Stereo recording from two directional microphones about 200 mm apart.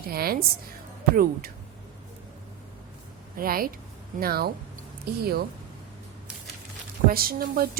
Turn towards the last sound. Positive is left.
turn(degrees=-45)  # may be behind; listen again after turning